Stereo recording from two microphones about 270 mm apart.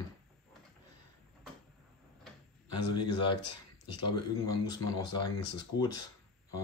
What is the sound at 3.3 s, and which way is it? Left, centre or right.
Speech, left.